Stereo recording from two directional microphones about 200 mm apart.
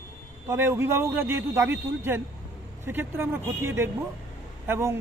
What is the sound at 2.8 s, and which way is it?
Speech, 10° right (ahead or behind).